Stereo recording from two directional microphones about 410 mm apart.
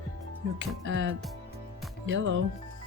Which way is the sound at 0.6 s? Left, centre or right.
Right.